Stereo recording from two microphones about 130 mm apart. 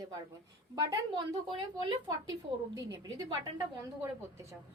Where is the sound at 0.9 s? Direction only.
35° right (ahead or behind).